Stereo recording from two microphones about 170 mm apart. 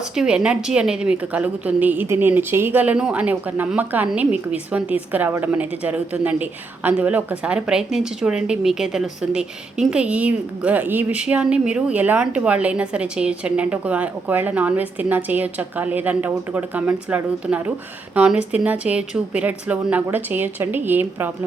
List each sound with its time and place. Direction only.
0.1 s a woman's voice: 5° right (ahead or behind)